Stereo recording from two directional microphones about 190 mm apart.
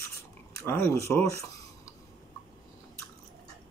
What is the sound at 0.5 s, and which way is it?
Speech, 15° left (ahead or behind).